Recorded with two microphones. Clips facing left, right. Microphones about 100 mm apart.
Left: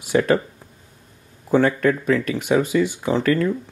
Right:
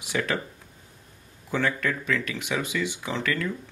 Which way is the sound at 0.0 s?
45° left (ahead or behind).